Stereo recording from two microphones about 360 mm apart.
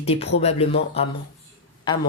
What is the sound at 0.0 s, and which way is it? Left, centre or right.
Speech, centre.